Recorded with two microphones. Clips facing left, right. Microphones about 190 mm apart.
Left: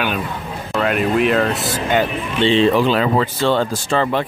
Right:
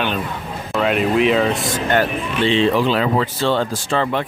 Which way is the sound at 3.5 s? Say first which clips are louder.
Left 2 dB; 40° left (ahead or behind).